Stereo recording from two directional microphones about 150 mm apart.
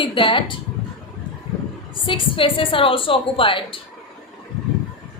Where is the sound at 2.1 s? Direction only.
35° left (ahead or behind).